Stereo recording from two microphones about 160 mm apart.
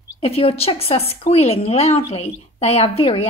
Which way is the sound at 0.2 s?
40° left (ahead or behind).